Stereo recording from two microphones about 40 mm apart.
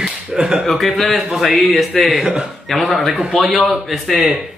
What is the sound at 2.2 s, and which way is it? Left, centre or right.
Speech, centre.